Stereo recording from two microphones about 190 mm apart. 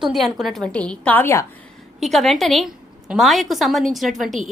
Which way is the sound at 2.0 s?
Centre (ahead or behind).